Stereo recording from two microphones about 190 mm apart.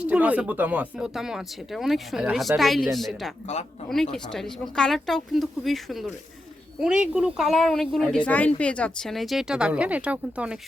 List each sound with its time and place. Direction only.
0.0 s speech: 5° right (ahead or behind)
3.4 s speech: 35° left (ahead or behind)
3.8 s speech: centre (ahead or behind)